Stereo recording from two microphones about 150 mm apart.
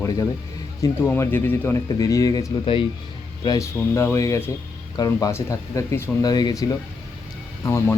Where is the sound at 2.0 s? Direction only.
25° left (ahead or behind).